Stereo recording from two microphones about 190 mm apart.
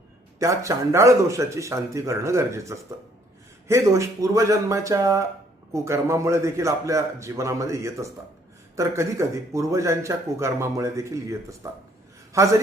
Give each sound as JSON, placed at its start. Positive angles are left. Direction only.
{"t": 0.3, "sound": "speech", "side_deg": -15}